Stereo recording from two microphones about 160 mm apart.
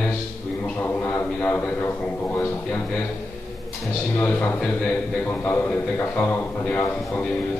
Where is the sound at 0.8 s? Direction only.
10° left (ahead or behind).